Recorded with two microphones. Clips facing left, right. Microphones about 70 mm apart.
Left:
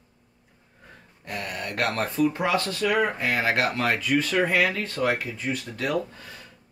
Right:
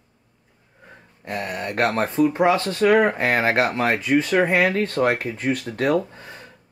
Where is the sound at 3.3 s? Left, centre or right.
Right.